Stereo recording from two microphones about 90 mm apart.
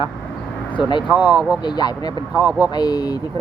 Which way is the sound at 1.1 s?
20° right (ahead or behind).